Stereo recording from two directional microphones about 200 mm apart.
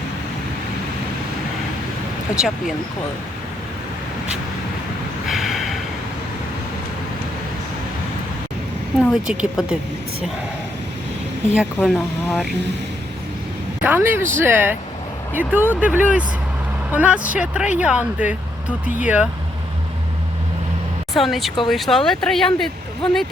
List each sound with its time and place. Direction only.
2.3 s speech: 5° right (ahead or behind)
5.3 s snort: centre (ahead or behind)
9.0 s speech: centre (ahead or behind)
11.5 s speech: centre (ahead or behind)
13.8 s speech: 10° right (ahead or behind)
21.1 s speech: centre (ahead or behind)